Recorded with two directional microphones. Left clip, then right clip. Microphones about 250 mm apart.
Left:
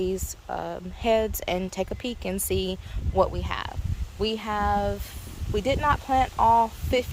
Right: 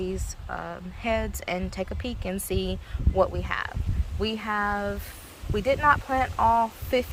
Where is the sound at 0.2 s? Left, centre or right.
Centre.